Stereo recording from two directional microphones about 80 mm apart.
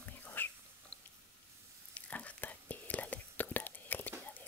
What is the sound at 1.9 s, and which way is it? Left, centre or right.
Whispering, centre.